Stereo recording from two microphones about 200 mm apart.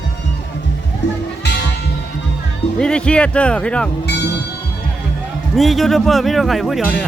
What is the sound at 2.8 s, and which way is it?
Speech, 5° left (ahead or behind).